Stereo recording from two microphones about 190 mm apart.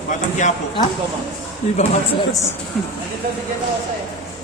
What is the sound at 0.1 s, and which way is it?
Speech, 40° left (ahead or behind).